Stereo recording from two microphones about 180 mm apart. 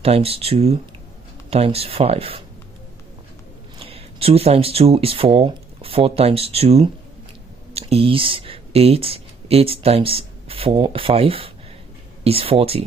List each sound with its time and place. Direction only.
0.0 s speech: 35° right (ahead or behind)
3.8 s speech: 35° right (ahead or behind)